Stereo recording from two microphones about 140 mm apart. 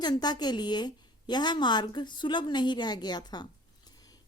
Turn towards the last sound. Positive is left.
turn(degrees=30)  # may be behind; listen again after turning